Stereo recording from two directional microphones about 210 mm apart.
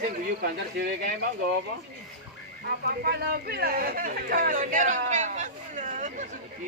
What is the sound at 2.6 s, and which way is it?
Speech, 50° right (ahead or behind).